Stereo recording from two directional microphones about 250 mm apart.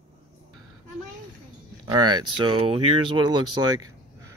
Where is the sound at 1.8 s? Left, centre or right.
Centre.